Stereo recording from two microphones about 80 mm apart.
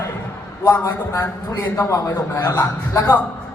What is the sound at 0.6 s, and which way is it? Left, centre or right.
Speech, left.